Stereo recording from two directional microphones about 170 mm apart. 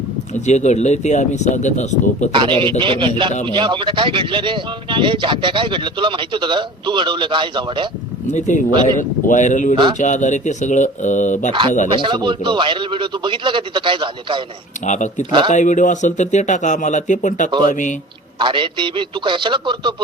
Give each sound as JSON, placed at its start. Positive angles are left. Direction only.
{"t": 0.4, "sound": "speech", "side_deg": 45}
{"t": 2.3, "sound": "speech", "side_deg": -30}
{"t": 8.3, "sound": "speech", "side_deg": 45}
{"t": 11.9, "sound": "speech", "side_deg": -30}
{"t": 14.8, "sound": "speech", "side_deg": 45}
{"t": 18.3, "sound": "speech", "side_deg": -30}